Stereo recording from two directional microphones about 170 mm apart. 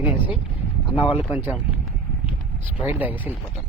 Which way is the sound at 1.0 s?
30° left (ahead or behind).